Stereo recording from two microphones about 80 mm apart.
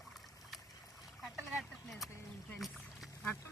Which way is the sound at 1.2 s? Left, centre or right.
Centre.